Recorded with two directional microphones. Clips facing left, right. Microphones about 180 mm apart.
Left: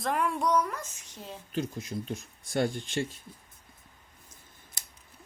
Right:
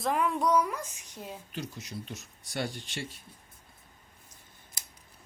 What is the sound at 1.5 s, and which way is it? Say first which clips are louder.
Speech: left 8 dB; 50° left (ahead or behind).